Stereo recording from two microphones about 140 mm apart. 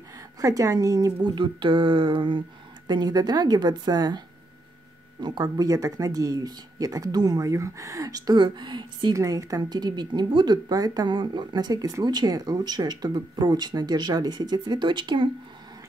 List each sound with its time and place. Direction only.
0.4 s speech: 25° right (ahead or behind)
5.2 s speech: 30° right (ahead or behind)